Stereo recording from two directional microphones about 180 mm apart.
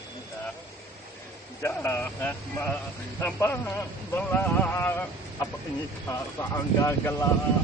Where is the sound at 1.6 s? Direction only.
15° left (ahead or behind).